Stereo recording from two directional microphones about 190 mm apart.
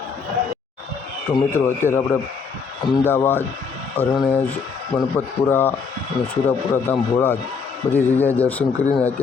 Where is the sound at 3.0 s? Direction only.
10° left (ahead or behind).